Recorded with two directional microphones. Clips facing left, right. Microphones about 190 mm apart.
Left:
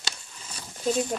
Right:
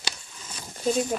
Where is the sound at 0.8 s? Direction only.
Centre (ahead or behind).